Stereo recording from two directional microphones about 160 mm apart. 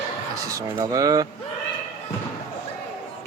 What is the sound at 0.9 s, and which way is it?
Speech, 25° right (ahead or behind).